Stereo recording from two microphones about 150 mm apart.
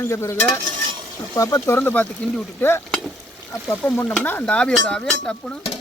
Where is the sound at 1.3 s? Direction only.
20° left (ahead or behind).